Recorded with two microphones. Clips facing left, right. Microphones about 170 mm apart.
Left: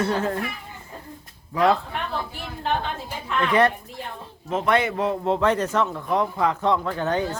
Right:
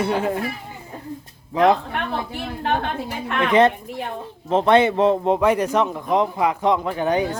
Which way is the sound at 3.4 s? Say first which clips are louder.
Right 4 dB; 20° right (ahead or behind).